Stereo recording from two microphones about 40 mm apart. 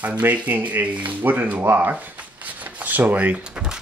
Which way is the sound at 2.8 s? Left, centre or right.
Right.